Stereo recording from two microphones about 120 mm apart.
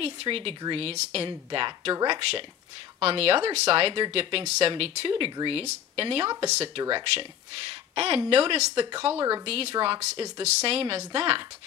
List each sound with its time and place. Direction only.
0.0 s speech: 50° right (ahead or behind)
5.6 s speech: 55° right (ahead or behind)
6.8 s speech: 45° right (ahead or behind)